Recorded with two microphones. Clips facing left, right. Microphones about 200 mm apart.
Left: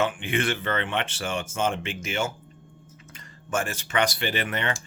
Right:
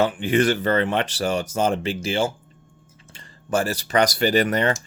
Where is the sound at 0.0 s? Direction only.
35° right (ahead or behind).